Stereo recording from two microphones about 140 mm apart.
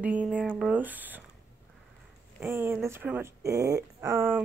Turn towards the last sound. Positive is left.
turn(degrees=-15)  # may be behind; listen again after turning